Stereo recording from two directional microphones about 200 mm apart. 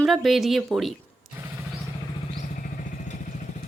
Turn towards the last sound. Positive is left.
turn(degrees=40)  # may be behind; listen again after turning